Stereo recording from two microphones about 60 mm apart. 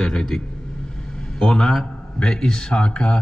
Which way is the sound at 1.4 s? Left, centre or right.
Centre.